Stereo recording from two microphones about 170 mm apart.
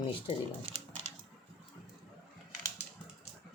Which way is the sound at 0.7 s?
45° right (ahead or behind).